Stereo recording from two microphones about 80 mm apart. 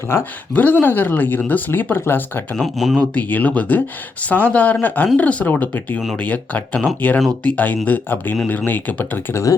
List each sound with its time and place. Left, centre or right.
0.5 s speech: left
2.6 s speech: centre
3.0 s speech: left